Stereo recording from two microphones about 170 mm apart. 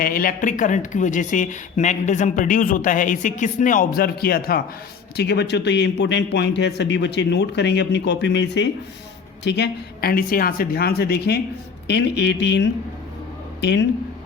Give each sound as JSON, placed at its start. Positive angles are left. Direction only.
{"t": 0.0, "sound": "speech", "side_deg": 55}
{"t": 5.1, "sound": "a man's voice", "side_deg": 75}
{"t": 11.9, "sound": "a man's voice", "side_deg": 90}